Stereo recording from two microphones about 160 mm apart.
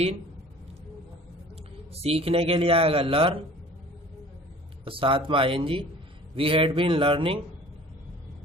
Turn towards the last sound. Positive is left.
turn(degrees=-35)  # may be behind; listen again after turning